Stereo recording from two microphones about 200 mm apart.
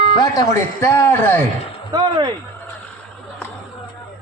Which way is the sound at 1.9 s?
25° right (ahead or behind).